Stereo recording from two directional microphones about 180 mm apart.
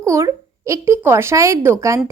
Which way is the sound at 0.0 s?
15° right (ahead or behind).